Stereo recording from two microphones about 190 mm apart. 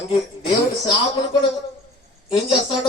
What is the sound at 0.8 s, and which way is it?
A man's voice, 25° left (ahead or behind).